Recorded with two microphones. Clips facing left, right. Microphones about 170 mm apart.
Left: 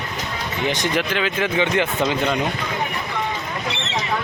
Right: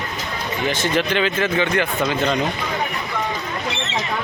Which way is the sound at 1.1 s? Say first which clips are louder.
Right 2 dB; 5° left (ahead or behind).